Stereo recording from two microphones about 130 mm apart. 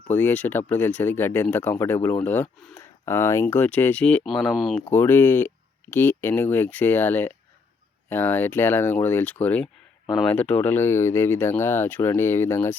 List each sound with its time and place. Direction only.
0.1 s speech: 15° left (ahead or behind)
4.9 s speech: 15° left (ahead or behind)